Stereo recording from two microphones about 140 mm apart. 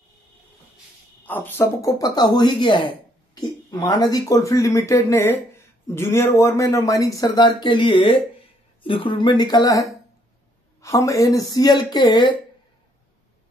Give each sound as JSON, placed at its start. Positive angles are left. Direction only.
{"t": 1.2, "sound": "speech", "side_deg": 15}